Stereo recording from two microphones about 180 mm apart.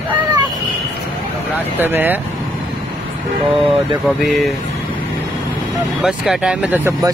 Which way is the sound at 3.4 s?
Centre (ahead or behind).